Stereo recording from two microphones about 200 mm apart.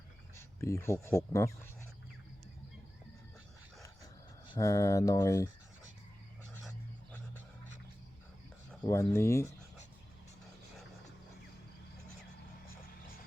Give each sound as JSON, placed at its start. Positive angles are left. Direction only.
{"t": 0.6, "sound": "speech", "side_deg": 15}
{"t": 4.4, "sound": "speech", "side_deg": 20}
{"t": 8.7, "sound": "speech", "side_deg": 10}